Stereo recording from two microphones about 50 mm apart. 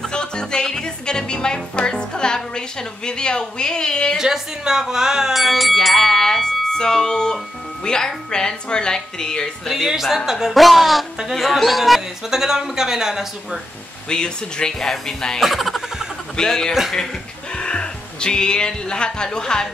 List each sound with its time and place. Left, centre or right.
0.0 s music: centre
4.2 s speech: centre
7.8 s music: centre
9.7 s speech: centre
14.0 s music: centre
15.4 s speech: centre
16.4 s music: centre
17.6 s speech: centre